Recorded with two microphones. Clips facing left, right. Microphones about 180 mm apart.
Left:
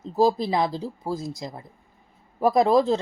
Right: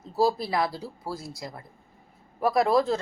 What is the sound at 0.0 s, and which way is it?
A woman's voice, 20° left (ahead or behind).